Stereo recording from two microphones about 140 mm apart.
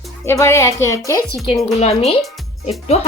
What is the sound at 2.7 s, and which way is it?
Speech, 50° left (ahead or behind).